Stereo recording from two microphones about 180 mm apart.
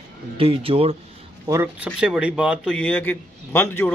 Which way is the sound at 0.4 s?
30° right (ahead or behind).